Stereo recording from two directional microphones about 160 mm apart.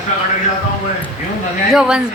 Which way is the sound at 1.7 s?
5° right (ahead or behind).